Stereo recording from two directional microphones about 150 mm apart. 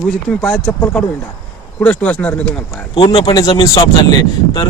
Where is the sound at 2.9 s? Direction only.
30° left (ahead or behind).